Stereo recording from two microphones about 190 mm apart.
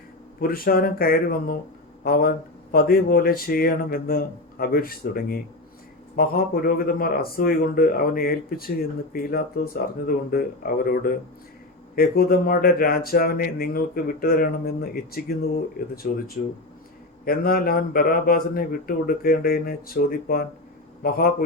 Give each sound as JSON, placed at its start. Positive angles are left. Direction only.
{"t": 0.3, "sound": "speech", "side_deg": 50}
{"t": 17.2, "sound": "speech", "side_deg": 50}